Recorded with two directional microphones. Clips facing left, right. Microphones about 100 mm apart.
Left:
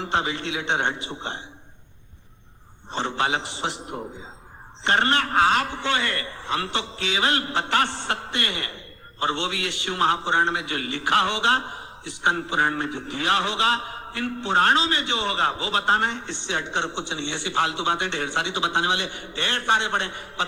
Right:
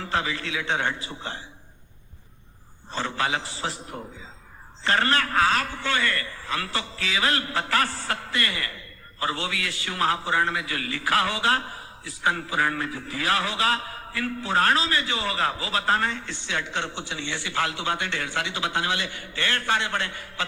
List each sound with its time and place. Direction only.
0.0 s a man's voice: 25° left (ahead or behind)
2.9 s a man's voice: 25° left (ahead or behind)